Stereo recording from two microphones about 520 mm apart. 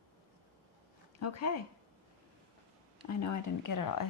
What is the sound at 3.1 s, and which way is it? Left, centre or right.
Speech, left.